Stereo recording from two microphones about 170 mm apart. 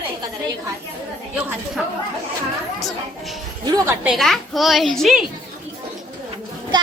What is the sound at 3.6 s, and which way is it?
Speech, 20° right (ahead or behind).